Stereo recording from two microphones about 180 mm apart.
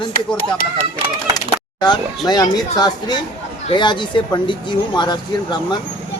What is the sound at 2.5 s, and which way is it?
A man's voice, 20° left (ahead or behind).